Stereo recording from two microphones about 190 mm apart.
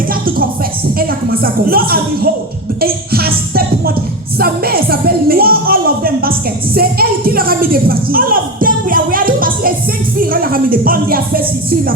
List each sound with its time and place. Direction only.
0.1 s music: 50° right (ahead or behind)
0.9 s a woman's voice: 50° right (ahead or behind)